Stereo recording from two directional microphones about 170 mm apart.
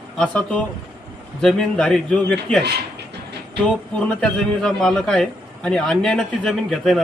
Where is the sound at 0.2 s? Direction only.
5° left (ahead or behind).